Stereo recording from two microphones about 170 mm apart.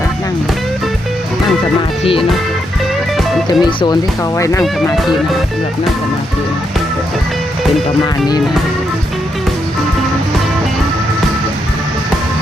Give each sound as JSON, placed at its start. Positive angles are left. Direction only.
{"t": 3.6, "sound": "speech", "side_deg": 25}